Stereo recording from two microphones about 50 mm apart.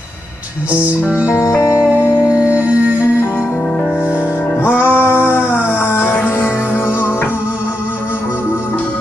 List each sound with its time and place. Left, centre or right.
0.7 s music: right
1.4 s music: left
2.4 s music: right
4.6 s music: right
5.3 s a sound: left
6.2 s music: left